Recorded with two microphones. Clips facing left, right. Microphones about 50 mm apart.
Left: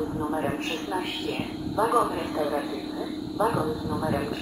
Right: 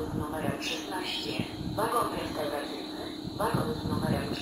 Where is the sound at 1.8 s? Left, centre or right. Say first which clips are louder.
Left 6 dB; centre.